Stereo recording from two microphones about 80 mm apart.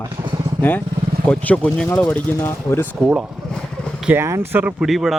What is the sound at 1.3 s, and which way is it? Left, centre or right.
A man's voice, centre.